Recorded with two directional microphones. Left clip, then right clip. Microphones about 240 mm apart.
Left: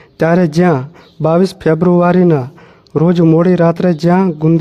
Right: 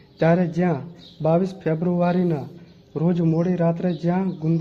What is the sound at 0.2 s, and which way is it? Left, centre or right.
Speech, left.